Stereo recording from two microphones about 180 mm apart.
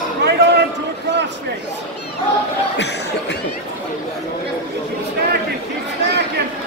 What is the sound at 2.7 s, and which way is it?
Speech, 70° left (ahead or behind).